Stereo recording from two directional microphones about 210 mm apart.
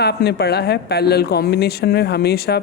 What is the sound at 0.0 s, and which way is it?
Speech, 50° left (ahead or behind).